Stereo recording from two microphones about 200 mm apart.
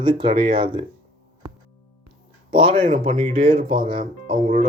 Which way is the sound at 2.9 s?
40° right (ahead or behind).